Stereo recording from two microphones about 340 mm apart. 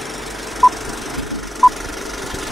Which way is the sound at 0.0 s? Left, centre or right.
Centre.